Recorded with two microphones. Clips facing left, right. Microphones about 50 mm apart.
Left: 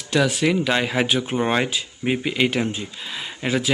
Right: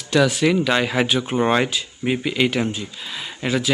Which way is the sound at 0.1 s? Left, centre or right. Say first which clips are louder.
Right 2 dB; centre.